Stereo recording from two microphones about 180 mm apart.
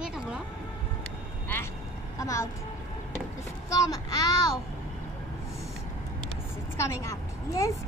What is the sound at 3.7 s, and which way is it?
Speech, 20° left (ahead or behind).